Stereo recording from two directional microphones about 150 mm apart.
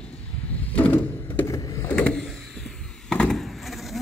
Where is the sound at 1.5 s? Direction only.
20° left (ahead or behind).